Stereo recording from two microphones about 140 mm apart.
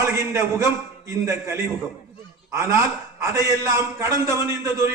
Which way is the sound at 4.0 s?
20° right (ahead or behind).